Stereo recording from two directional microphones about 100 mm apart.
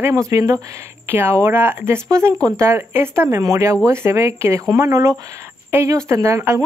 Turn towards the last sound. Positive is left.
turn(degrees=-30)  # may be behind; listen again after turning